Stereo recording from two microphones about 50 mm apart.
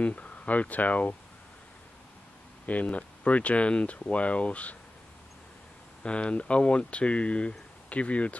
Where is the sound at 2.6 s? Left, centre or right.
Left.